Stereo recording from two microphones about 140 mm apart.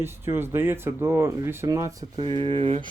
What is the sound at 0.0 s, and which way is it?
Speech, 15° right (ahead or behind).